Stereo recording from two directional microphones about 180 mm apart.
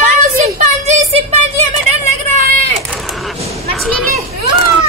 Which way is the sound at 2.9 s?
Centre (ahead or behind).